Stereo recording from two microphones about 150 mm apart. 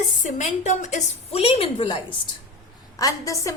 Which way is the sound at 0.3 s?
50° left (ahead or behind).